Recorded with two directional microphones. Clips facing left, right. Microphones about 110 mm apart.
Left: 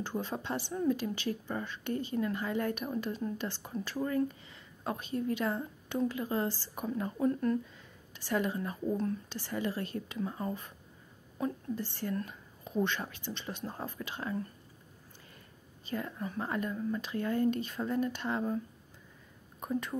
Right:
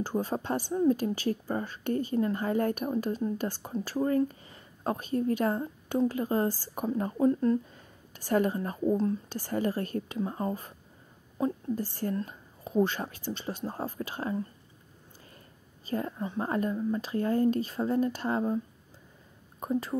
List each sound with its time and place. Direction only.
0.0 s a woman's voice: 40° right (ahead or behind)
7.7 s speech: 45° right (ahead or behind)
10.1 s a woman's voice: 35° right (ahead or behind)
11.7 s a woman's voice: 40° right (ahead or behind)
15.9 s a woman's voice: 35° right (ahead or behind)
19.6 s a woman's voice: 30° right (ahead or behind)